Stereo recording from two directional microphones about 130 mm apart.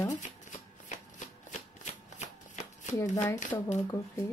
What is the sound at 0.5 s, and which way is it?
Shuffling cards, 70° left (ahead or behind).